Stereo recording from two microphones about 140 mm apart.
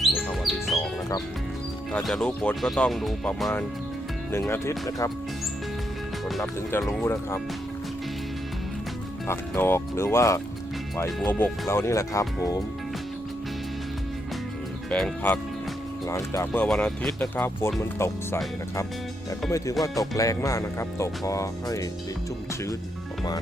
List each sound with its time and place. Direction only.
0.0 s music: centre (ahead or behind)
1.9 s speech: 5° left (ahead or behind)
4.3 s speech: 15° left (ahead or behind)
6.4 s speech: 15° left (ahead or behind)
9.2 s speech: 15° left (ahead or behind)
11.7 s speech: 20° left (ahead or behind)
14.8 s speech: 10° left (ahead or behind)
16.0 s speech: 20° left (ahead or behind)
16.5 s speech: 5° left (ahead or behind)
19.5 s speech: 25° left (ahead or behind)